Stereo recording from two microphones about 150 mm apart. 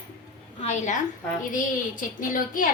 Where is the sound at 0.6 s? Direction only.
50° left (ahead or behind).